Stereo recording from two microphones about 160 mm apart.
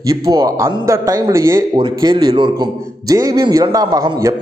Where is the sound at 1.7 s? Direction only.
30° right (ahead or behind).